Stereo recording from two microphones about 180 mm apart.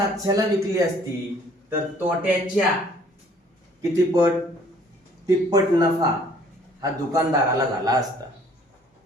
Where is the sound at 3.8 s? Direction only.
20° right (ahead or behind).